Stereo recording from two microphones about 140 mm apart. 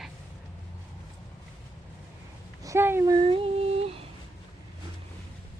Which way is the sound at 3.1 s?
40° right (ahead or behind).